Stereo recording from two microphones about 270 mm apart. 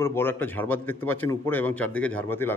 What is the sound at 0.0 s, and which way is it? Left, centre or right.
A man's voice, centre.